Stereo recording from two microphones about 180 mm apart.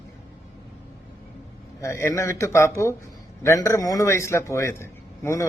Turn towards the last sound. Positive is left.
turn(degrees=15)  # may be behind; listen again after turning